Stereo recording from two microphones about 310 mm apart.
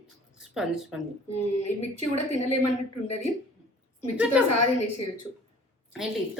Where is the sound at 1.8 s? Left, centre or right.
Left.